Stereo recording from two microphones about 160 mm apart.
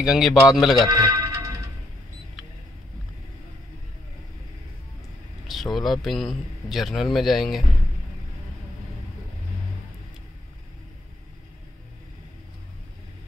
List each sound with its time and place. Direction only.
0.0 s a man's voice: 5° right (ahead or behind)
0.8 s music: 20° right (ahead or behind)
5.5 s a man's voice: centre (ahead or behind)